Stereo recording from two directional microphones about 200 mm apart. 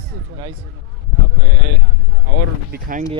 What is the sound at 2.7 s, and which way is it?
Speech, 40° right (ahead or behind).